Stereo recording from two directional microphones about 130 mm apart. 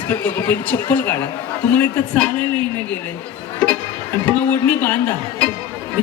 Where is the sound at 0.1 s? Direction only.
15° left (ahead or behind).